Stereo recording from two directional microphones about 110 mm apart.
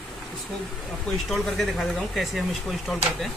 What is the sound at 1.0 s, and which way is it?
Speech, centre (ahead or behind).